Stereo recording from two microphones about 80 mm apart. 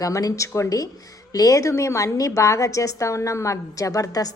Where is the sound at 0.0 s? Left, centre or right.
Left.